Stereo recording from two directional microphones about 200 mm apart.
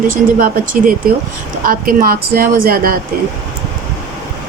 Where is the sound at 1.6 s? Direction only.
45° right (ahead or behind).